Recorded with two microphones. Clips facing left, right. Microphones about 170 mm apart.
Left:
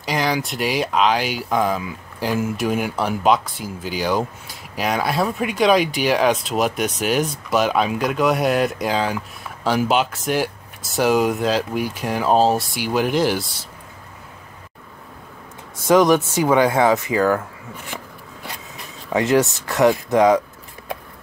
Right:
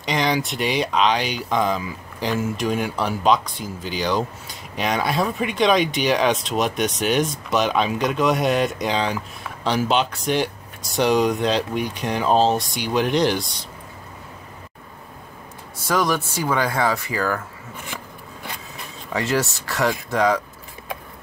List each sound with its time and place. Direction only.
0.0 s speech: 5° left (ahead or behind)
15.9 s speech: 20° left (ahead or behind)
19.1 s speech: 20° left (ahead or behind)